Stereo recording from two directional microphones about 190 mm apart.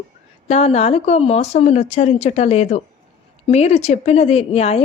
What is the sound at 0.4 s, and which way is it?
A woman's voice, 35° left (ahead or behind).